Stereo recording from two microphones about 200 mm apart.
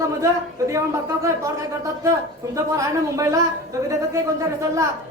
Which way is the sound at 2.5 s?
15° right (ahead or behind).